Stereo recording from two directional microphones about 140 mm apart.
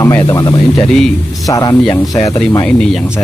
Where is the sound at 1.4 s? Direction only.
25° left (ahead or behind).